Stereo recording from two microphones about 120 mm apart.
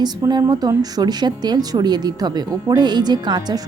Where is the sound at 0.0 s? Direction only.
35° right (ahead or behind).